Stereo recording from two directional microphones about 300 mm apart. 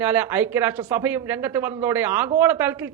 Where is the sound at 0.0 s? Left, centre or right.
Centre.